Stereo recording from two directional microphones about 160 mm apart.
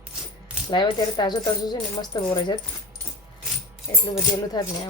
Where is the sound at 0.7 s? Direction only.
25° left (ahead or behind).